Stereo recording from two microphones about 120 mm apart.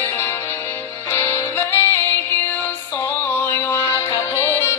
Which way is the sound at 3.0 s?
15° left (ahead or behind).